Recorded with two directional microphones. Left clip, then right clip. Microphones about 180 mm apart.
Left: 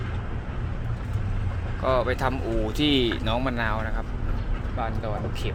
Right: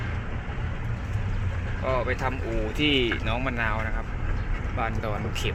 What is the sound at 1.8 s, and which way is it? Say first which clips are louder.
Speech: left 3 dB; 20° left (ahead or behind).